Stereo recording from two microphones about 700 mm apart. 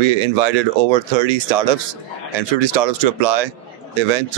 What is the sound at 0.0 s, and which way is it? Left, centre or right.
Speech, right.